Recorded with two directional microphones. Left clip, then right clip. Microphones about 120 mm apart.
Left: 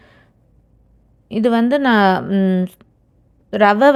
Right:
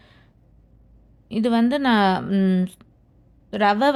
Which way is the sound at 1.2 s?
30° left (ahead or behind).